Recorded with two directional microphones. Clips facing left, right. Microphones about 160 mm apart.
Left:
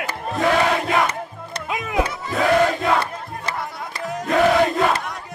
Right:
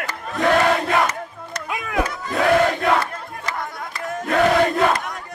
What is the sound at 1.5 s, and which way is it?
Music, 20° left (ahead or behind).